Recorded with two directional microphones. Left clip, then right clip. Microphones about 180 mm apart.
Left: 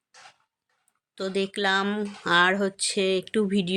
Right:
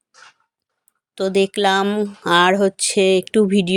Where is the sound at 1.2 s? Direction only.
40° right (ahead or behind).